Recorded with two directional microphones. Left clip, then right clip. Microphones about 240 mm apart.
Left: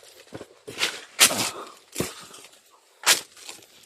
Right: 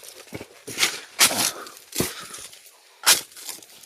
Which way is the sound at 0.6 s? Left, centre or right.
Right.